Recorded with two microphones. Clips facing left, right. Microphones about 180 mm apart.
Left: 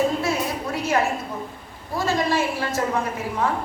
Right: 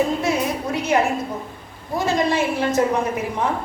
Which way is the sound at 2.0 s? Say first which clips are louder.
Right 2 dB; 20° right (ahead or behind).